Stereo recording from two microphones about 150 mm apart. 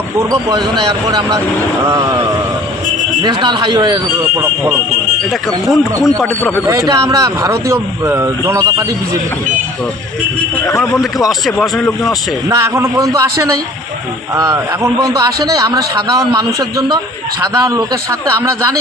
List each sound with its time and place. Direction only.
0.2 s speech: 20° right (ahead or behind)
3.2 s speech: 30° right (ahead or behind)
5.3 s speech: centre (ahead or behind)
6.7 s speech: 20° right (ahead or behind)
10.8 s speech: centre (ahead or behind)
12.5 s speech: 20° right (ahead or behind)